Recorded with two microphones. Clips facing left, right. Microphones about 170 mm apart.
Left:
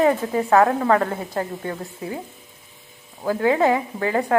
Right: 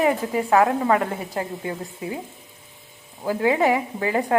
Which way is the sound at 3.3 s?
20° right (ahead or behind).